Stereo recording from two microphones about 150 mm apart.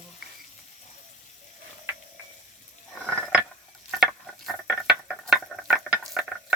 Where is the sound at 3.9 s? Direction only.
Centre (ahead or behind).